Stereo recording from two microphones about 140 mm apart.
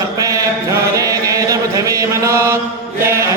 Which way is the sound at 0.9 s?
25° right (ahead or behind).